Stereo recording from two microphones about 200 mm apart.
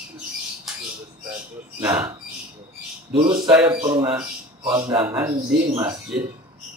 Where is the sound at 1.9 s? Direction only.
15° right (ahead or behind).